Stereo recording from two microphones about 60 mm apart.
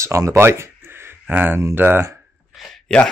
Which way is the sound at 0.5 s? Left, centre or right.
Right.